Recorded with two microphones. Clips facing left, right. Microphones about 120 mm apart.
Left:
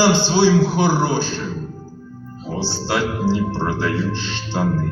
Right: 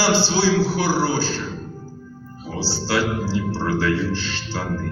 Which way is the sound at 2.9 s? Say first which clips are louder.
Left 2 dB; 20° left (ahead or behind).